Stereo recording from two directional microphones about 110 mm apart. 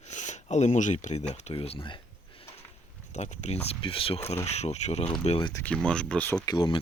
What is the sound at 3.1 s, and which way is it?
Speech, 90° left.